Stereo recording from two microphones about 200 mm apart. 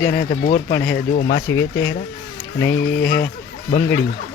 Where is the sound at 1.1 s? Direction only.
55° left (ahead or behind).